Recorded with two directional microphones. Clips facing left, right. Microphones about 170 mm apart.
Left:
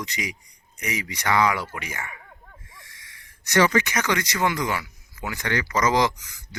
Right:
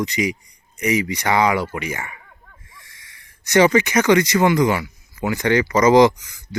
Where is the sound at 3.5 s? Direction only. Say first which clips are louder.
Right 5 dB; 20° right (ahead or behind).